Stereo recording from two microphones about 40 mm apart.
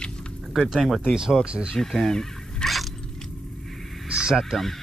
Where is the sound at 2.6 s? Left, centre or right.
Left.